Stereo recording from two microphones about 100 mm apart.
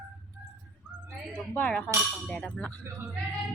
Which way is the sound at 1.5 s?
15° left (ahead or behind).